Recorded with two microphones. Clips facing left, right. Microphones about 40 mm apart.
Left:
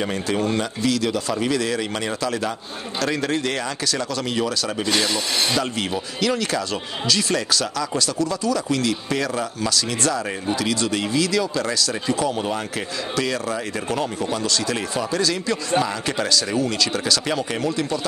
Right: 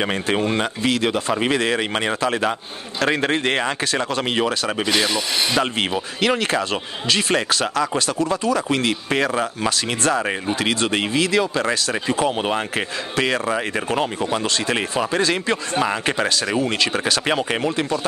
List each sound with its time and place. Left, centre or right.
0.0 s speech: right